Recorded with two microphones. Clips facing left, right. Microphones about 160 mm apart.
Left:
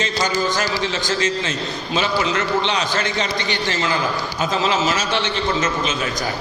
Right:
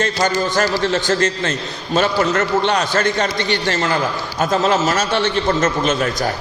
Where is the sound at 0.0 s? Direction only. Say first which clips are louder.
Right 3 dB; 55° right (ahead or behind).